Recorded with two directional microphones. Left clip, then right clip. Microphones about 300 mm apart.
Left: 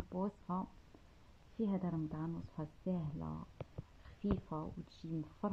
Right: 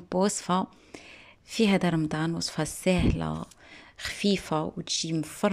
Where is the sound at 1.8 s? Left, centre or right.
Right.